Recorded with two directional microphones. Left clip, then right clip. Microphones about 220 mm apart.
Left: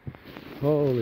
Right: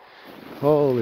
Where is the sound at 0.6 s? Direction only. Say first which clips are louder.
Right 5 dB; 15° right (ahead or behind).